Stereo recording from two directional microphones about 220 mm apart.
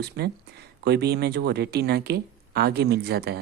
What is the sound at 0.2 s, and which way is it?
Speech, 50° right (ahead or behind).